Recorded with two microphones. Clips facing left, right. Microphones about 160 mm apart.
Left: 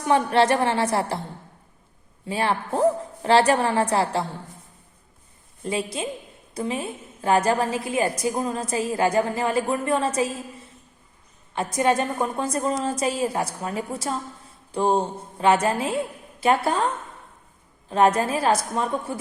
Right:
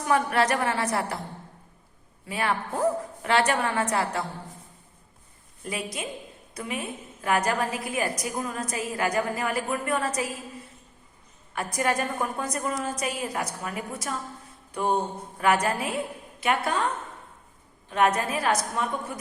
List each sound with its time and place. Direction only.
0.0 s a woman's voice: 25° left (ahead or behind)
2.2 s a woman's voice: 30° left (ahead or behind)
5.6 s a woman's voice: 30° left (ahead or behind)
11.5 s a woman's voice: 25° left (ahead or behind)
17.8 s a woman's voice: 30° left (ahead or behind)